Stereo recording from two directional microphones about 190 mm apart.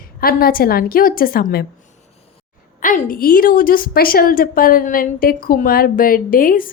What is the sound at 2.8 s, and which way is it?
A woman's voice, 45° left (ahead or behind).